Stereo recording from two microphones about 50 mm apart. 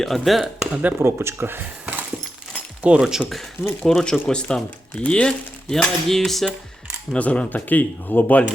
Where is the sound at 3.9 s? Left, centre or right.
Centre.